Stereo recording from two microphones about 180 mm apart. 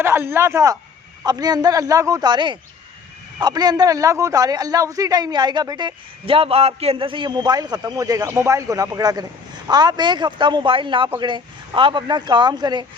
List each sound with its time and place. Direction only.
0.0 s a man's voice: 15° right (ahead or behind)